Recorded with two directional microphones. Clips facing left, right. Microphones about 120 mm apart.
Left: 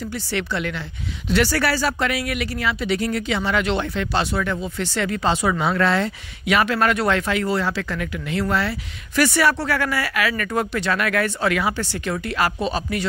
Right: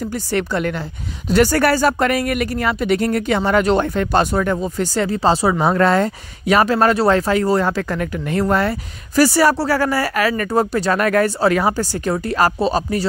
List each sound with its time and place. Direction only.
0.3 s a woman's voice: 45° right (ahead or behind)